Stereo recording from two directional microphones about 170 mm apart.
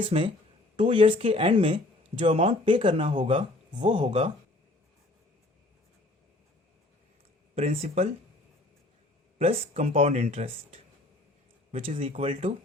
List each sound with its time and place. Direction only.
0.0 s speech: 35° right (ahead or behind)
3.2 s speech: 45° right (ahead or behind)
7.8 s speech: 35° right (ahead or behind)
9.4 s speech: 35° right (ahead or behind)